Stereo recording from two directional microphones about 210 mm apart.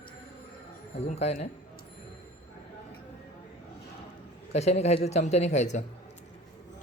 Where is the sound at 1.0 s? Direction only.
30° left (ahead or behind).